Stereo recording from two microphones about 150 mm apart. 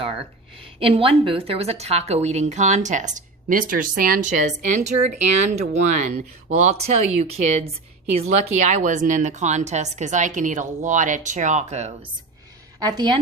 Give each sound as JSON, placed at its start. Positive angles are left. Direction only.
{"t": 0.6, "sound": "a woman's voice", "side_deg": -40}
{"t": 12.8, "sound": "a woman's voice", "side_deg": -25}